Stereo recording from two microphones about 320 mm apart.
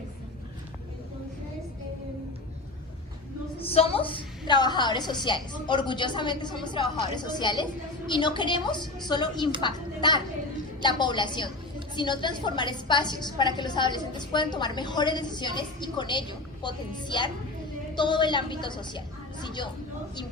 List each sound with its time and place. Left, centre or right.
3.6 s a woman's voice: centre